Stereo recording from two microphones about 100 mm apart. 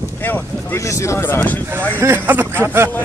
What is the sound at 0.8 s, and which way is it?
Speech, 30° left (ahead or behind).